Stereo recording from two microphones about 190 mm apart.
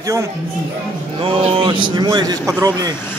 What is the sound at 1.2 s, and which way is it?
A man's voice, 30° right (ahead or behind).